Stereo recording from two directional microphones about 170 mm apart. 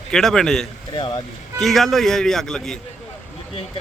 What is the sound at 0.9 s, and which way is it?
Speech, 25° left (ahead or behind).